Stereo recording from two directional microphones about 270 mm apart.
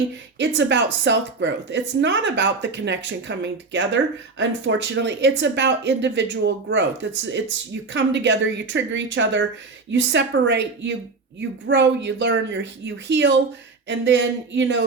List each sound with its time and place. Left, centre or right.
0.3 s speech: right